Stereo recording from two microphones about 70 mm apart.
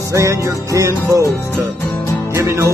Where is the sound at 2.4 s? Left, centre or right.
Right.